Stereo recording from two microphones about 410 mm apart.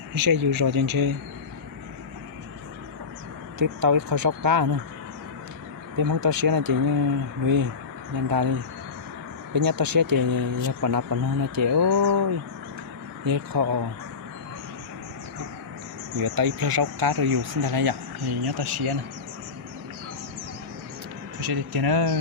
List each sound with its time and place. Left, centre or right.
0.2 s speech: right
3.6 s speech: right
6.0 s speech: right
16.1 s speech: right
21.4 s speech: right